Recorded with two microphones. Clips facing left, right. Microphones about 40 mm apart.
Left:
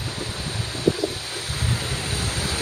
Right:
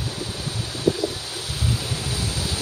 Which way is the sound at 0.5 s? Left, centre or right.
Left.